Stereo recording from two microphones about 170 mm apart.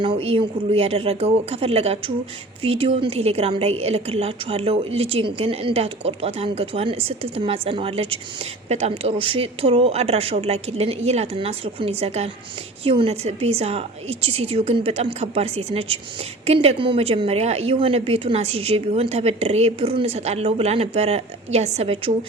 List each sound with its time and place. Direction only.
0.0 s a woman's voice: 30° right (ahead or behind)